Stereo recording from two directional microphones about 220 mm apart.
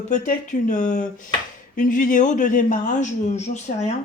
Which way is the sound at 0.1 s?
35° left (ahead or behind).